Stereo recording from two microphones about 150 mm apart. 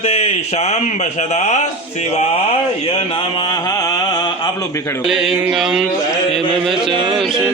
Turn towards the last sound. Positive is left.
turn(degrees=-35)  # may be behind; listen again after turning